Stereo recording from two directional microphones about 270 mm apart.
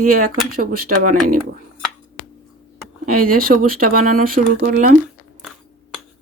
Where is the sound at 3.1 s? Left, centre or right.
Right.